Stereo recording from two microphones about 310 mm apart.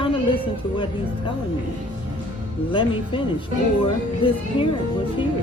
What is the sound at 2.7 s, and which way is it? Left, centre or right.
Speech, centre.